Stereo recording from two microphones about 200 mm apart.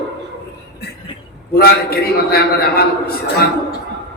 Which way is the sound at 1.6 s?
50° left (ahead or behind).